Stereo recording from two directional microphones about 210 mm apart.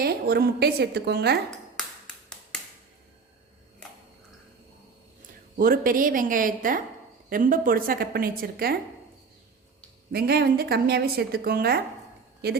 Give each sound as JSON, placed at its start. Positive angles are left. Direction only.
{"t": 0.0, "sound": "a woman's voice", "side_deg": -45}
{"t": 5.5, "sound": "a woman's voice", "side_deg": -45}
{"t": 10.1, "sound": "a woman's voice", "side_deg": -50}